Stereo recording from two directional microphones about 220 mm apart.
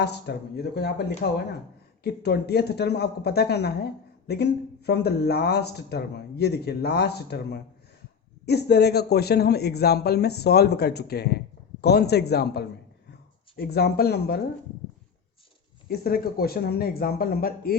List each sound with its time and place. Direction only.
0.0 s a man's voice: 50° left (ahead or behind)
15.9 s a man's voice: 45° left (ahead or behind)